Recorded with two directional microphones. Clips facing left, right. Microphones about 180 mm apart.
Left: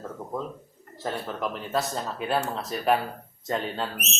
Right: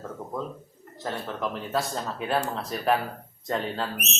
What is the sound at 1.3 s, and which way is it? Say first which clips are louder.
Speech: right 1 dB; centre (ahead or behind).